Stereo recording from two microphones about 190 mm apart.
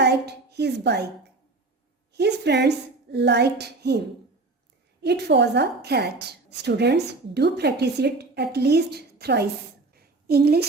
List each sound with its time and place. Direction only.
0.0 s a woman's voice: 60° right (ahead or behind)
5.0 s a woman's voice: 65° right (ahead or behind)
9.9 s a sound: 55° right (ahead or behind)